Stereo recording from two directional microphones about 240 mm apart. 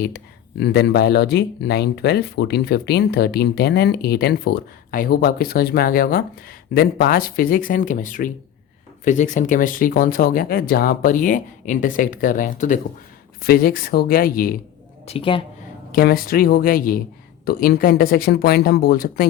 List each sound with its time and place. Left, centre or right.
0.6 s speech: left
15.0 s a woman's voice: left
15.9 s speech: left